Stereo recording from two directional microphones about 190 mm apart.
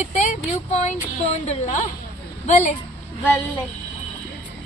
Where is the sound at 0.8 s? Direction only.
35° left (ahead or behind).